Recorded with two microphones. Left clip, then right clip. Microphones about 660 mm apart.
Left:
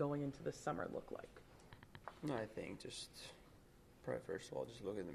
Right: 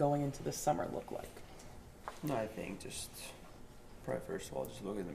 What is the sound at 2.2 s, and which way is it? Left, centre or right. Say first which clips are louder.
Speech: right 6 dB; left.